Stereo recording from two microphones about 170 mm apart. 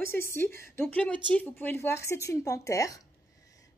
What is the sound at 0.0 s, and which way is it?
A woman's voice, 15° left (ahead or behind).